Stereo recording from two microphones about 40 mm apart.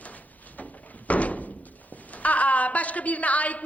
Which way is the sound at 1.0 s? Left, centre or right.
Left.